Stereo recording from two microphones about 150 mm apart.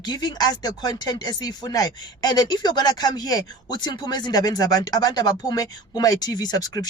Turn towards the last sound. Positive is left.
turn(degrees=25)  # may be behind; listen again after turning